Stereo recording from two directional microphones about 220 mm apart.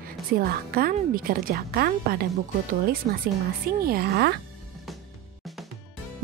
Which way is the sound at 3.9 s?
45° right (ahead or behind).